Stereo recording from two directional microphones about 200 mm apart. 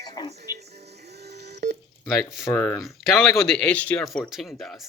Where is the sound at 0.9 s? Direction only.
55° right (ahead or behind).